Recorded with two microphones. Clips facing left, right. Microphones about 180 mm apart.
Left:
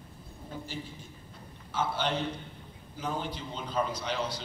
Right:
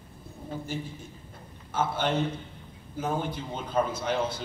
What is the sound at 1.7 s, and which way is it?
A man's voice, 50° right (ahead or behind).